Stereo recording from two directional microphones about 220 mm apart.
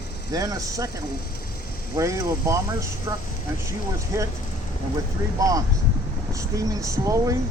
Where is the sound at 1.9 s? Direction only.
15° right (ahead or behind).